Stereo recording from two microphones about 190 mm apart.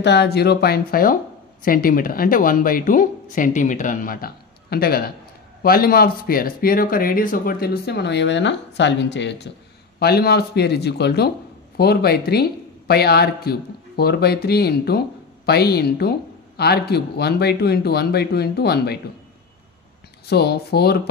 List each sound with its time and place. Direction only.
0.0 s speech: 60° left (ahead or behind)
9.9 s speech: 55° left (ahead or behind)
20.2 s speech: 60° left (ahead or behind)